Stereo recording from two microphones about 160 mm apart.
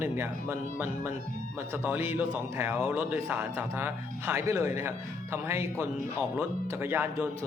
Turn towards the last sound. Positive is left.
turn(degrees=-15)  # may be behind; listen again after turning